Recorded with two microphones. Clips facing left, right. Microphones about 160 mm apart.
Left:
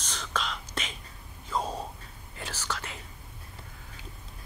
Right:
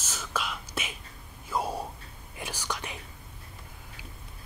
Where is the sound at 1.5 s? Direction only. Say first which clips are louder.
Right 1 dB; 10° right (ahead or behind).